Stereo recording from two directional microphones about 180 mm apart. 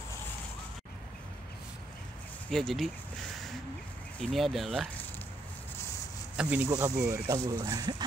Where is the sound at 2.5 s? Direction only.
Centre (ahead or behind).